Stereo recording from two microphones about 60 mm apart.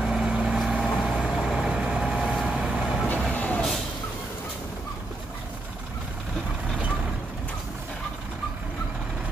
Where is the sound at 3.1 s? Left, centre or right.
Left.